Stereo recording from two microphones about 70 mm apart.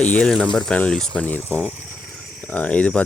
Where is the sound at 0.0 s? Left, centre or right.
Centre.